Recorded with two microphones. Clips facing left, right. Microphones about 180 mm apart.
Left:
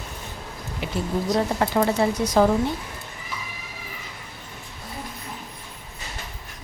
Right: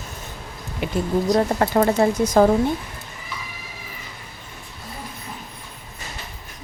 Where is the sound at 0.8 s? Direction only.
50° right (ahead or behind).